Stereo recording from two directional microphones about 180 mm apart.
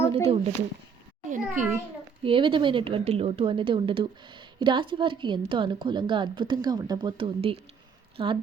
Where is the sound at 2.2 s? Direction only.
30° right (ahead or behind).